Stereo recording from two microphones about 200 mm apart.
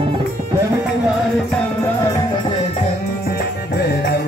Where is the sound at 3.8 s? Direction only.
55° left (ahead or behind).